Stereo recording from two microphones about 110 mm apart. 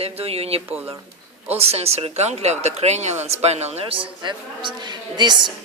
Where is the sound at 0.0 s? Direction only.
65° right (ahead or behind); by 5.4 s 40° right (ahead or behind).